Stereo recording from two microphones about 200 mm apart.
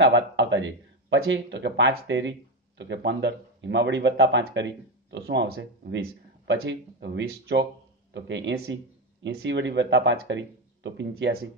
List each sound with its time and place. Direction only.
0.0 s speech: 65° right (ahead or behind)